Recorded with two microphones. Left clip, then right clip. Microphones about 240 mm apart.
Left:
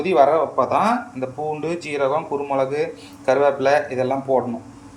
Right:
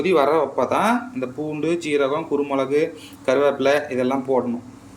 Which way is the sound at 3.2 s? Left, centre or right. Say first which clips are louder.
Left 1 dB; centre.